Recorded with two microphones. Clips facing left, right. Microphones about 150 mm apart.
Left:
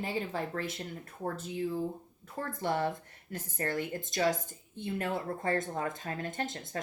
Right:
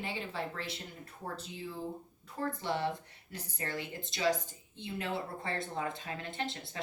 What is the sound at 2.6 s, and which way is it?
Speech, 50° left (ahead or behind).